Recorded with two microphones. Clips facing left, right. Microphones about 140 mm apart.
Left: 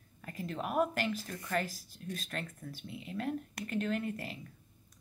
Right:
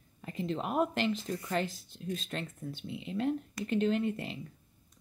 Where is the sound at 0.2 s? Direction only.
25° right (ahead or behind).